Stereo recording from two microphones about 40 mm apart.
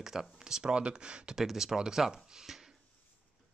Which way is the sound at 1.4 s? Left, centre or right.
Centre.